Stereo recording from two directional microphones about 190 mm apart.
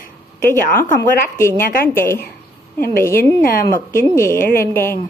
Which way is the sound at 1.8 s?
10° left (ahead or behind).